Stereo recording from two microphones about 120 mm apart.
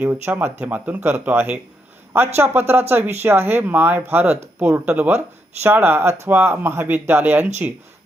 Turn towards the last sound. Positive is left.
turn(degrees=-15)  # may be behind; listen again after turning